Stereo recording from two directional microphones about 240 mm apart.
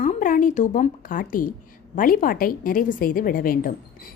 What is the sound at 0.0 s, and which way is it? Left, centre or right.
A woman's voice, left.